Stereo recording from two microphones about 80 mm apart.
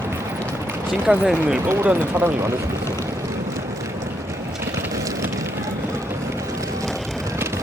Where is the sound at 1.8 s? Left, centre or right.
Right.